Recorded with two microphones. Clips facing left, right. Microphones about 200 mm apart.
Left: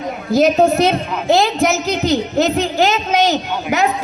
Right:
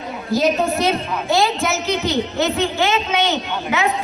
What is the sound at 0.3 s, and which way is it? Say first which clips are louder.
A woman's voice: left 6 dB; 45° left (ahead or behind).